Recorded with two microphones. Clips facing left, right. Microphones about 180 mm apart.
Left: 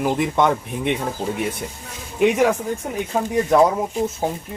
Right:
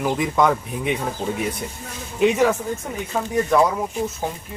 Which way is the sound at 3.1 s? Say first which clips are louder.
Left 2 dB; 20° left (ahead or behind).